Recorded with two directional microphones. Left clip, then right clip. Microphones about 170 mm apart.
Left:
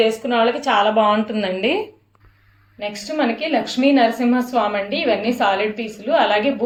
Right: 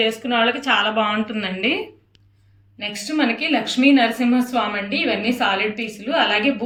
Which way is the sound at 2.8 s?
30° left (ahead or behind).